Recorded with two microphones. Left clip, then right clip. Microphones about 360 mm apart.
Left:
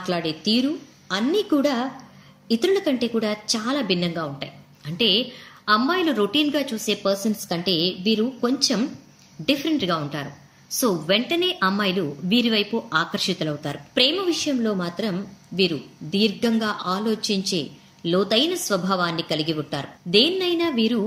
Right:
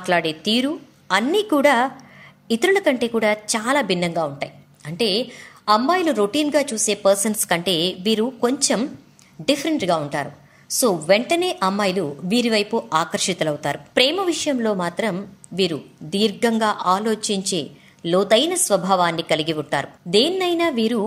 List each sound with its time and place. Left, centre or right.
0.0 s a woman's voice: centre